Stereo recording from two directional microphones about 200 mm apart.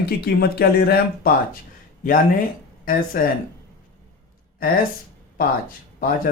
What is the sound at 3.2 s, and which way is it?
Speech, 45° left (ahead or behind).